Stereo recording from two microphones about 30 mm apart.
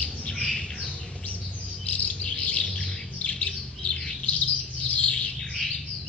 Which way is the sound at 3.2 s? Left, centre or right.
Left.